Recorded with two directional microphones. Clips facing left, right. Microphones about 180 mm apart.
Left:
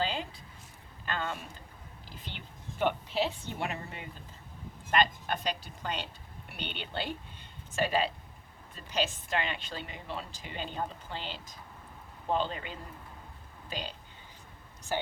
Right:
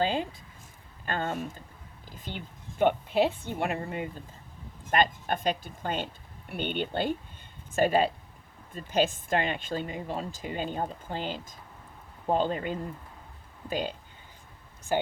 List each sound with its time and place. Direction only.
0.0 s a woman's voice: 50° right (ahead or behind)